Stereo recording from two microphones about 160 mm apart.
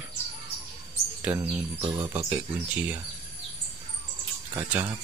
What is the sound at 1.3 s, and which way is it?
Speech, 10° right (ahead or behind).